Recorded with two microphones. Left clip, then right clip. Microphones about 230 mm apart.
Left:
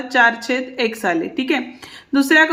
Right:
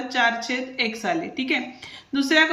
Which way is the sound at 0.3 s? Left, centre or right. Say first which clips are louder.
Left 5 dB; left.